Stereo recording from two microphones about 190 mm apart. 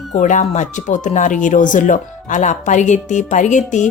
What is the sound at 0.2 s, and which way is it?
Speech, 40° left (ahead or behind).